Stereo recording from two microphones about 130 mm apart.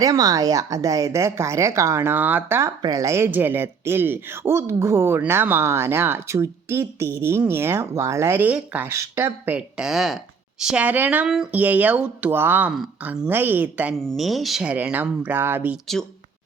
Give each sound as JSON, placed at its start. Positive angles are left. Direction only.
{"t": 0.0, "sound": "speech", "side_deg": -30}
{"t": 14.0, "sound": "speech", "side_deg": 0}